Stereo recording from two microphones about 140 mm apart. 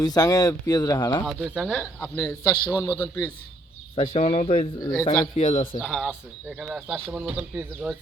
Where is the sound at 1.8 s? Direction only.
15° left (ahead or behind).